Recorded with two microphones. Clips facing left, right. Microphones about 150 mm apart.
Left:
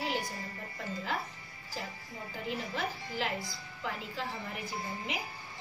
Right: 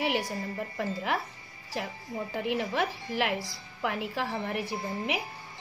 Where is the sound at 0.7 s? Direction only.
75° right (ahead or behind).